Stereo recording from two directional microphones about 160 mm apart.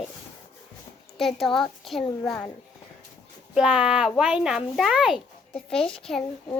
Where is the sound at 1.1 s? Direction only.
Centre (ahead or behind).